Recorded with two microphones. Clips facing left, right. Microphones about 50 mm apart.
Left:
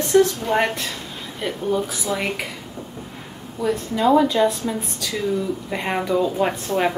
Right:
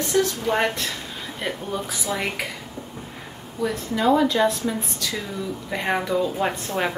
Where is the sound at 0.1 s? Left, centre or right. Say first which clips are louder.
Left 6 dB; centre.